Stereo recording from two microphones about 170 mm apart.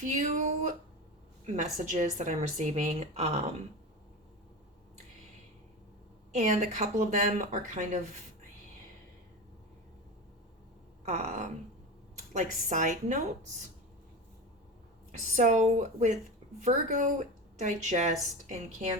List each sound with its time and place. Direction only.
0.0 s a woman's voice: 45° right (ahead or behind)
6.3 s a woman's voice: 45° right (ahead or behind)
11.0 s a sound: 45° right (ahead or behind)
12.6 s a woman's voice: 45° right (ahead or behind)
15.4 s a woman's voice: 45° right (ahead or behind)